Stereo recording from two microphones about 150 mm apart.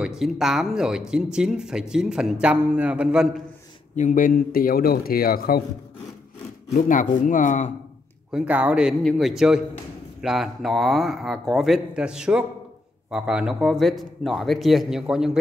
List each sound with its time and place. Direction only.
0.0 s a man's voice: 5° right (ahead or behind)
3.9 s speech: 60° left (ahead or behind); by 5.6 s 80° left
6.7 s speech: 60° left (ahead or behind)
8.3 s speech: 5° right (ahead or behind)